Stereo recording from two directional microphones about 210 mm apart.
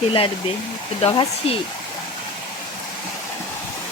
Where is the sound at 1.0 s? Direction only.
25° left (ahead or behind).